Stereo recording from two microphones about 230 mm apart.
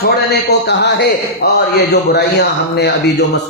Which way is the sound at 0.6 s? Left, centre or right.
Left.